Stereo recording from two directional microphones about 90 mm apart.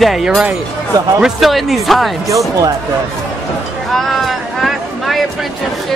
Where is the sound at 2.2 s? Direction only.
35° right (ahead or behind).